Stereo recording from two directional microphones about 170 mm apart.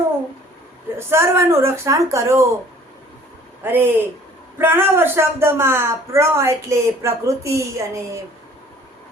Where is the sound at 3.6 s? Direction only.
10° right (ahead or behind).